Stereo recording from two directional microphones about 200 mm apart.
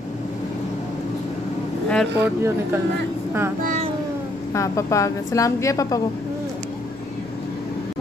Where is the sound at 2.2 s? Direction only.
10° right (ahead or behind).